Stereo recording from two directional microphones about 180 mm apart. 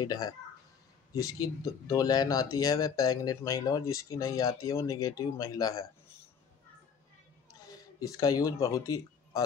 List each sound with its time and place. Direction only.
0.0 s speech: 20° left (ahead or behind)
7.6 s speech: 20° left (ahead or behind)